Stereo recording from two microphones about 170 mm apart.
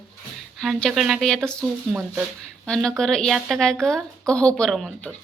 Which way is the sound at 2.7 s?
5° left (ahead or behind).